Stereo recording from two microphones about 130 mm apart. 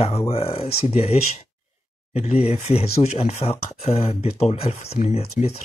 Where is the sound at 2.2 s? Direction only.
55° left (ahead or behind).